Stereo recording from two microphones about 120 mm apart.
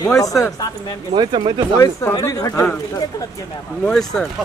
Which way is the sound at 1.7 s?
25° left (ahead or behind).